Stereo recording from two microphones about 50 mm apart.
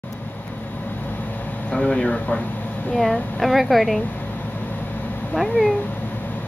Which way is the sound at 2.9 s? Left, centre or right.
Centre.